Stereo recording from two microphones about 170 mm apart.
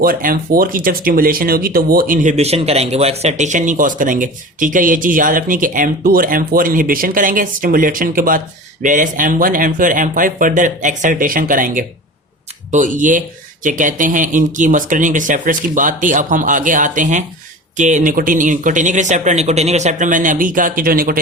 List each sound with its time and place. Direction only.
0.0 s speech: 55° right (ahead or behind)